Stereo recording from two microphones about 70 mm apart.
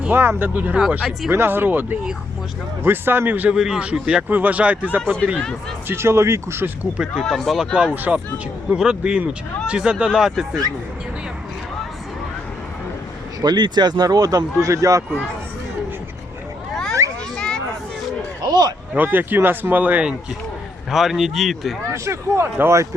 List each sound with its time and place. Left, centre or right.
0.1 s speech: right
3.5 s a man's voice: centre
5.9 s speech: right
6.9 s a man's voice: centre
7.3 s speech: centre
7.6 s a man's voice: centre
13.4 s speech: right
14.6 s speech: right
17.0 s children playing: right
17.3 s children playing: centre
18.4 s a sound: right
18.9 s speech: right
20.9 s speech: centre
21.9 s speech: right